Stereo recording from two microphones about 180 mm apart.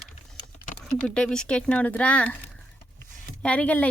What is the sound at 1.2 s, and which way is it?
Speech, 5° left (ahead or behind).